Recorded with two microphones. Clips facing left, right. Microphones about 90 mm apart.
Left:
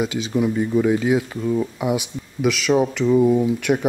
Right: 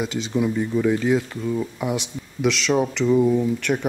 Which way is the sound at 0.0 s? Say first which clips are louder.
Left 2 dB; 5° left (ahead or behind).